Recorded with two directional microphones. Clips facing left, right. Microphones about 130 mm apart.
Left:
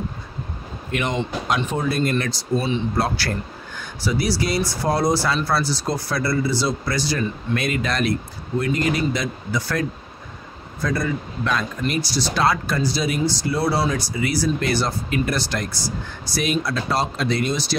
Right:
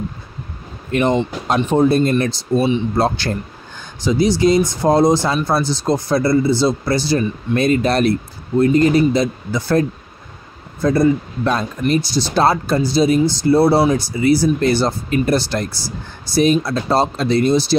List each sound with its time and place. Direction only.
0.9 s speech: 35° right (ahead or behind)